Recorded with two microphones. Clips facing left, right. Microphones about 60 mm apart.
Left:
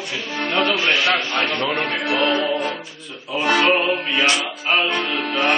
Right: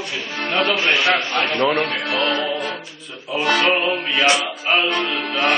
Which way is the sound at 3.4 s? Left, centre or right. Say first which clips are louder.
Left 1 dB; centre.